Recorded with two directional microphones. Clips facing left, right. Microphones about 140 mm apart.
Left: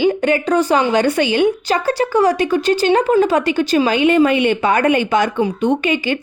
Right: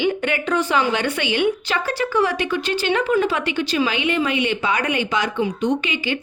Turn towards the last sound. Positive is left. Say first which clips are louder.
# left 5 dB
turn(degrees=45)  # may be behind; listen again after turning